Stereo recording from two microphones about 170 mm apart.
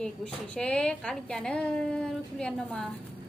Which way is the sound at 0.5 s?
5° left (ahead or behind).